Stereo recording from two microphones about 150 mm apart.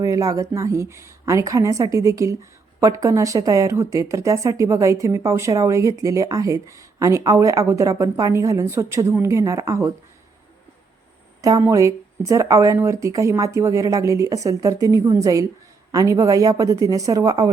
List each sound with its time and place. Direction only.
0.0 s a woman's voice: 20° right (ahead or behind)
11.4 s a woman's voice: 20° right (ahead or behind)